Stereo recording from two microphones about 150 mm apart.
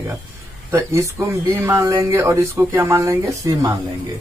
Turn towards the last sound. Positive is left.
turn(degrees=-20)  # may be behind; listen again after turning